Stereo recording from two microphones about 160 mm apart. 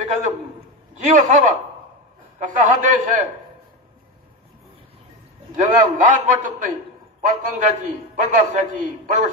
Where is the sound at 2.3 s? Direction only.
55° right (ahead or behind).